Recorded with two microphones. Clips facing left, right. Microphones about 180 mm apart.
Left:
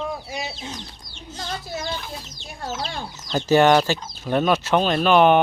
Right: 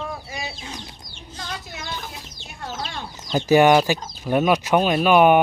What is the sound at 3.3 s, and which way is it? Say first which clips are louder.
Speech: right 1 dB; 15° right (ahead or behind).